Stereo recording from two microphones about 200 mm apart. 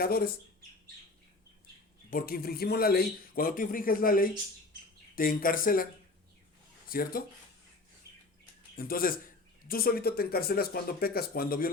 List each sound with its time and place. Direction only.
0.0 s speech: 50° left (ahead or behind)
2.0 s speech: 45° left (ahead or behind)
8.7 s speech: 45° left (ahead or behind)